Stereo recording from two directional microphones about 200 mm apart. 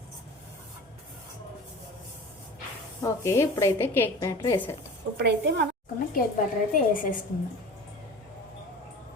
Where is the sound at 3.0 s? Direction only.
15° left (ahead or behind).